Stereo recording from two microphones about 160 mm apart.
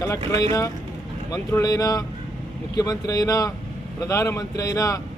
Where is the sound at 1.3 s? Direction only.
20° left (ahead or behind).